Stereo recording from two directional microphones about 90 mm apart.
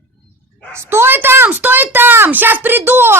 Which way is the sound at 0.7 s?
30° right (ahead or behind).